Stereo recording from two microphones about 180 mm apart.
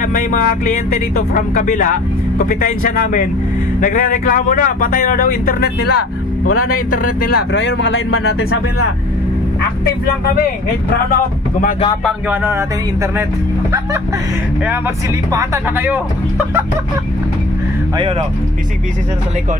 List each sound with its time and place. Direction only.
0.0 s speech: 50° left (ahead or behind)
7.5 s speech: 85° left
12.3 s speech: 15° right (ahead or behind)
15.3 s speech: 15° right (ahead or behind)